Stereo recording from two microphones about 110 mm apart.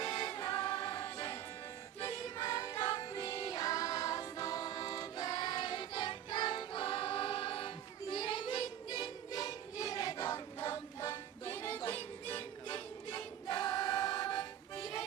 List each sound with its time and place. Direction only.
0.1 s music: 45° left (ahead or behind)
2.2 s music: 35° left (ahead or behind); by 7.7 s 50° left (ahead or behind)
8.1 s child singing: 50° left (ahead or behind); by 10.4 s 30° left (ahead or behind)
10.7 s music: 30° left (ahead or behind)
11.4 s music: 15° left (ahead or behind)
12.4 s choir: 40° left (ahead or behind)